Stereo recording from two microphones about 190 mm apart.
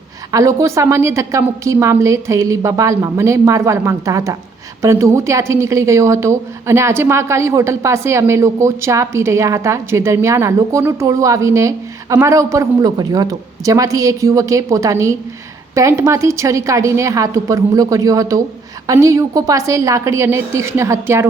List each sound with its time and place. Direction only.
0.3 s a woman's voice: 15° right (ahead or behind)